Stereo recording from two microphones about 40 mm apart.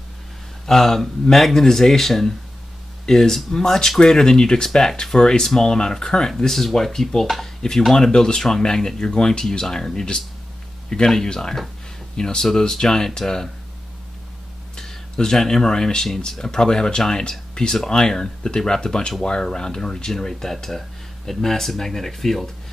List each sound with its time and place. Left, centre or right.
0.7 s speech: centre
14.8 s speech: centre